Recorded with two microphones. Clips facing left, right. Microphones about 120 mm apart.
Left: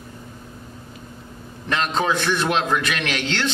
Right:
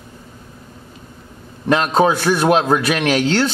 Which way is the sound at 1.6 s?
40° right (ahead or behind).